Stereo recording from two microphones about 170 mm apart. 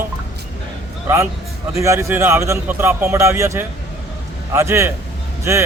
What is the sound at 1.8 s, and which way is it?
A man's voice, 15° right (ahead or behind).